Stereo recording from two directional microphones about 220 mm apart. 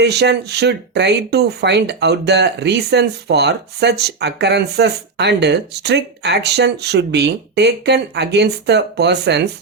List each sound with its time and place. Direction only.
0.0 s speech: 50° right (ahead or behind)